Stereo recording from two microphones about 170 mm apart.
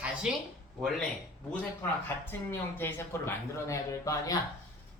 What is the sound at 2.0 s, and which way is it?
Speech, 15° left (ahead or behind).